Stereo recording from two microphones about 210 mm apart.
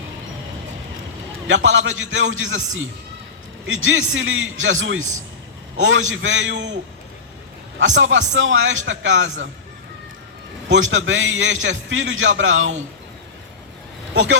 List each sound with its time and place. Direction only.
1.5 s a man's voice: 65° right (ahead or behind)
7.9 s a man's voice: 65° right (ahead or behind)
10.7 s a man's voice: 65° right (ahead or behind)